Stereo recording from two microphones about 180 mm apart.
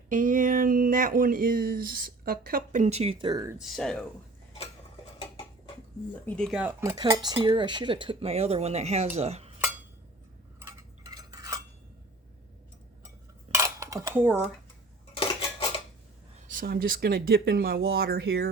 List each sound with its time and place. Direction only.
0.1 s speech: 45° right (ahead or behind)
2.8 s speech: 35° right (ahead or behind); by 3.6 s 20° right (ahead or behind)
3.6 s speech: centre (ahead or behind)
6.2 s speech: 5° left (ahead or behind); by 7.0 s 15° right (ahead or behind)
7.3 s speech: 25° right (ahead or behind)
10.6 s cutlery: 20° right (ahead or behind)
13.5 s dishes: 15° right (ahead or behind)
16.5 s speech: 50° right (ahead or behind)